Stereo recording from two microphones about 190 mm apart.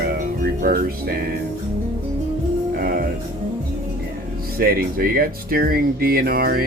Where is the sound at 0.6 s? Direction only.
50° right (ahead or behind).